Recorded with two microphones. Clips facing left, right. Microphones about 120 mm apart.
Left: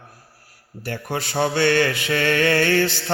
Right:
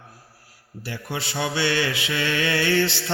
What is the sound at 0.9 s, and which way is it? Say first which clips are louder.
Music: left 4 dB; 45° left (ahead or behind).